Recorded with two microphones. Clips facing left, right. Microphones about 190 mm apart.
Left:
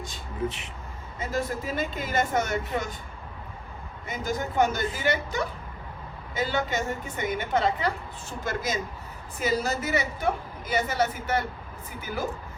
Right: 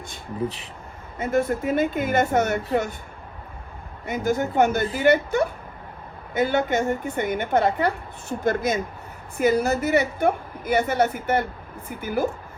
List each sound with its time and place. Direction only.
0.4 s speech: 35° right (ahead or behind)
1.2 s a woman's voice: 55° right (ahead or behind)
4.0 s a woman's voice: 55° right (ahead or behind)